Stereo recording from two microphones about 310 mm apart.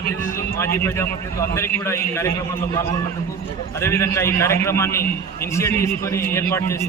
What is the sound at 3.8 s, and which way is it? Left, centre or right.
A man's voice, centre.